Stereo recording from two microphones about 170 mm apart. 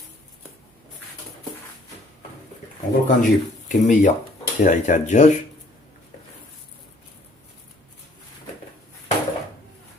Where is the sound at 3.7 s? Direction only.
45° left (ahead or behind).